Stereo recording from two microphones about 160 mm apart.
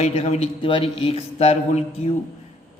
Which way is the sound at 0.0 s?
40° left (ahead or behind).